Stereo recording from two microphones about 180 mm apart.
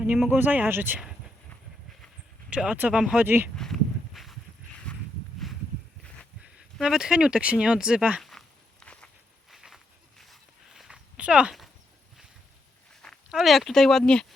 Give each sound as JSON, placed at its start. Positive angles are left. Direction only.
{"t": 0.0, "sound": "speech", "side_deg": -10}
{"t": 2.5, "sound": "speech", "side_deg": -5}
{"t": 3.5, "sound": "a sound", "side_deg": 5}
{"t": 4.9, "sound": "walk", "side_deg": 5}
{"t": 6.4, "sound": "a sound", "side_deg": -5}
{"t": 12.9, "sound": "speech", "side_deg": 5}